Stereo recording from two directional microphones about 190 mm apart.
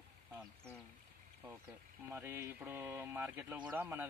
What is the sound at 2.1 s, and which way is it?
Speech, 10° right (ahead or behind).